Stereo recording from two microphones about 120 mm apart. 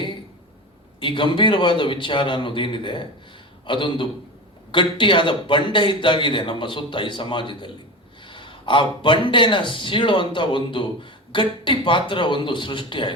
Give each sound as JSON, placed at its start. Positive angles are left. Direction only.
{"t": 0.9, "sound": "a man's voice", "side_deg": 45}